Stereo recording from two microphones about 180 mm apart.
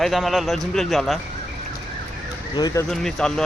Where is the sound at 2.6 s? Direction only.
20° left (ahead or behind).